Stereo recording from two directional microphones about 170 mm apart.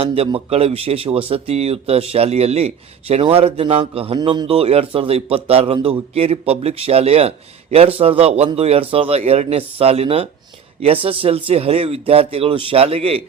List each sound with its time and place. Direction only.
0.0 s speech: 35° right (ahead or behind)